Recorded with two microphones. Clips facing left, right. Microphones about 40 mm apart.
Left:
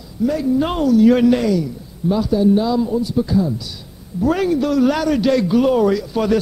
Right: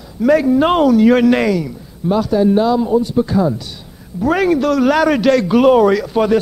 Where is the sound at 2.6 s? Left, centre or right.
Right.